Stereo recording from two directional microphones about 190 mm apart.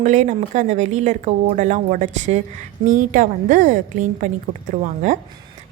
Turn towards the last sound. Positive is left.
turn(degrees=-40)  # may be behind; listen again after turning